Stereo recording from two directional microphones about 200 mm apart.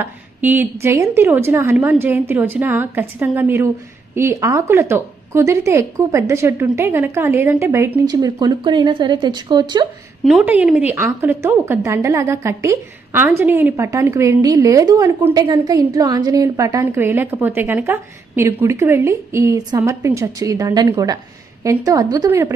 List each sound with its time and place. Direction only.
0.0 s a woman's voice: 10° right (ahead or behind)
10.2 s a woman's voice: 5° right (ahead or behind)